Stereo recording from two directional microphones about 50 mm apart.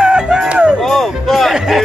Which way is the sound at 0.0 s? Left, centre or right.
Centre.